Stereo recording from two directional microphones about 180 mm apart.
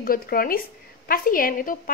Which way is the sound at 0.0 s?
55° left (ahead or behind).